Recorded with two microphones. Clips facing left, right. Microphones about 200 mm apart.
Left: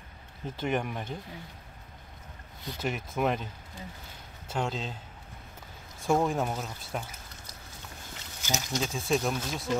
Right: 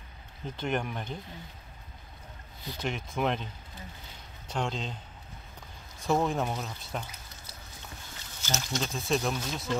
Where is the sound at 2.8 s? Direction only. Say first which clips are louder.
Left 1 dB; 5° left (ahead or behind).